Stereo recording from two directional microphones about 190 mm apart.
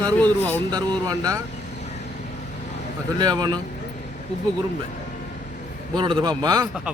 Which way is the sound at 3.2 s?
20° right (ahead or behind).